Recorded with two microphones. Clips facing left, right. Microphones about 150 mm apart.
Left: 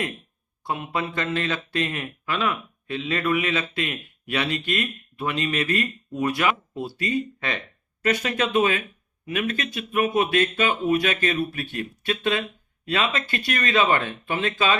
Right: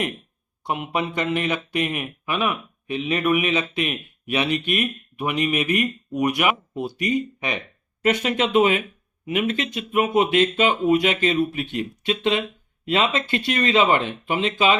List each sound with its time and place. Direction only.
0.6 s speech: 20° right (ahead or behind)